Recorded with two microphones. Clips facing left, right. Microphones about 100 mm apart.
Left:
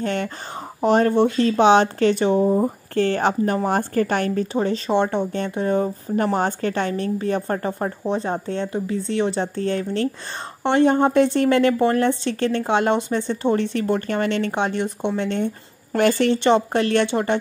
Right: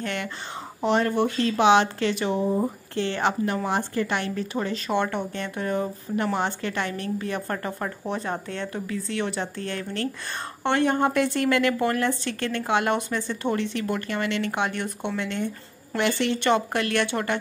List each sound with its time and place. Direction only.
0.0 s speech: 35° left (ahead or behind)
4.6 s a woman's voice: 30° left (ahead or behind)
6.1 s a woman's voice: 40° left (ahead or behind)
13.6 s a woman's voice: 40° left (ahead or behind); by 15.2 s 20° left (ahead or behind)
15.4 s speech: 45° left (ahead or behind)
16.4 s a woman's voice: 25° left (ahead or behind)